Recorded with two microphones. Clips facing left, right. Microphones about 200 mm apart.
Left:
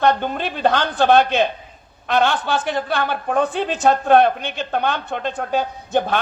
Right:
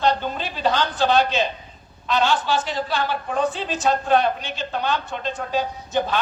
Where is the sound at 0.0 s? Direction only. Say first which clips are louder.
Left 3 dB; 55° left (ahead or behind).